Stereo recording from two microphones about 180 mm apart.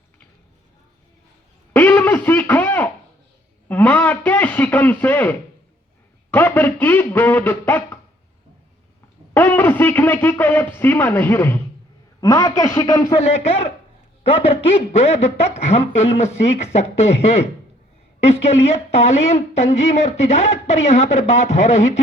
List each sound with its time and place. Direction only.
1.7 s radio: 10° left (ahead or behind)
3.7 s a sound: 10° left (ahead or behind)
6.3 s speech: 10° left (ahead or behind)
9.3 s speech: 10° left (ahead or behind)
13.1 s a woman's voice: 35° left (ahead or behind)
18.2 s a woman's voice: 35° left (ahead or behind)